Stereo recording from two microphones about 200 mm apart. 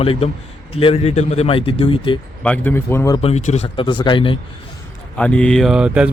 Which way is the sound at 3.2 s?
35° left (ahead or behind).